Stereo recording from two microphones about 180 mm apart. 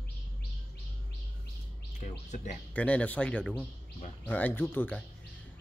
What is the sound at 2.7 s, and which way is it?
Speech, 10° left (ahead or behind).